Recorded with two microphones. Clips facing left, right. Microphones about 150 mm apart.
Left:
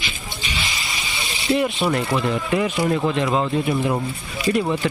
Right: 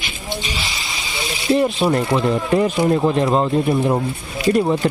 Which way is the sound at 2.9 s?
25° right (ahead or behind).